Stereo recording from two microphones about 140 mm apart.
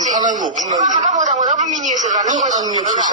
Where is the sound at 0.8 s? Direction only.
60° right (ahead or behind).